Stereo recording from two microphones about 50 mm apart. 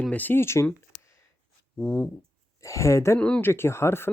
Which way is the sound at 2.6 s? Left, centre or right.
Left.